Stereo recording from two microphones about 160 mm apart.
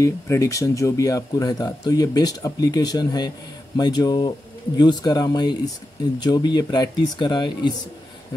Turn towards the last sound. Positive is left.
turn(degrees=30)  # may be behind; listen again after turning